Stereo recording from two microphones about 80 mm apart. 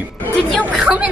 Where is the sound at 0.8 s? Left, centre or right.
Centre.